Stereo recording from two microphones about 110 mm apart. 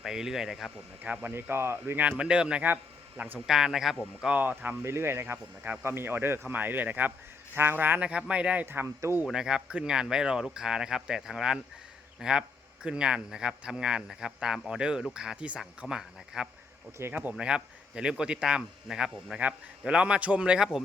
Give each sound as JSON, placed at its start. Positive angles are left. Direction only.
{"t": 0.0, "sound": "speech", "side_deg": -5}
{"t": 2.0, "sound": "speech", "side_deg": -10}
{"t": 4.3, "sound": "speech", "side_deg": -15}
{"t": 9.2, "sound": "speech", "side_deg": -5}
{"t": 17.0, "sound": "speech", "side_deg": -15}